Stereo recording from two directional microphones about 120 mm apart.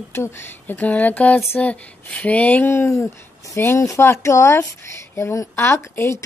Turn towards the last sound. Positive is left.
turn(degrees=20)  # may be behind; listen again after turning